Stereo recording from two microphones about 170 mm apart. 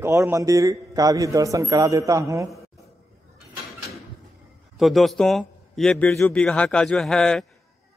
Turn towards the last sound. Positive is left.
turn(degrees=5)  # may be behind; listen again after turning